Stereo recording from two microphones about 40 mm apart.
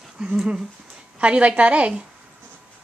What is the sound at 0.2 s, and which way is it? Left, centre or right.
Speech, right.